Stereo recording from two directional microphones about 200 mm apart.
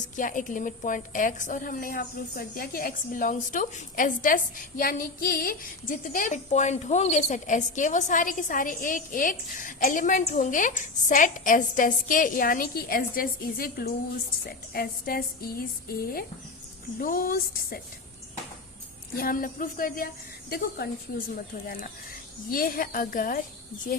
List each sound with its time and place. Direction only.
0.2 s a woman's voice: 40° left (ahead or behind)
19.1 s speech: 45° left (ahead or behind)
22.5 s speech: 45° left (ahead or behind)